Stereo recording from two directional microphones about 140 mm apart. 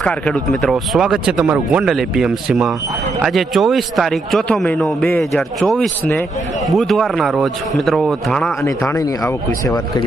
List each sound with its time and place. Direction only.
0.0 s speech: 10° left (ahead or behind)
8.6 s speech: 20° left (ahead or behind)